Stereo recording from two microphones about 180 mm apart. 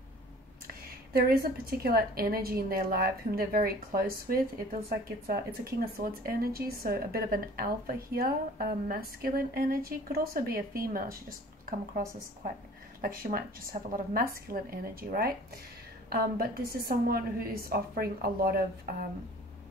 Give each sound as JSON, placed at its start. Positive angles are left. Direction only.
{"t": 0.7, "sound": "a woman's voice", "side_deg": -60}
{"t": 13.0, "sound": "a woman's voice", "side_deg": -55}